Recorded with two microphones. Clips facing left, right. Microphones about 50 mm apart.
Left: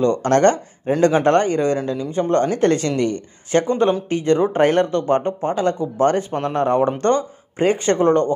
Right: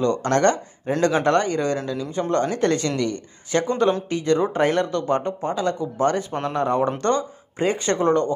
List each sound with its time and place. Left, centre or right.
0.0 s speech: left
2.0 s speech: centre
2.3 s speech: left